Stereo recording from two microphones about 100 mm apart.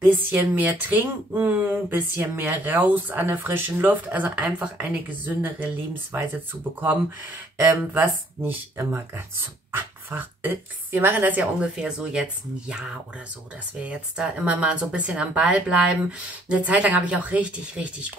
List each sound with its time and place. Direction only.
0.0 s speech: 20° right (ahead or behind)
7.5 s speech: 20° right (ahead or behind)